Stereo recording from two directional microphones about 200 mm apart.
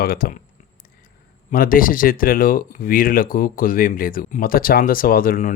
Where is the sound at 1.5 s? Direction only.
45° left (ahead or behind).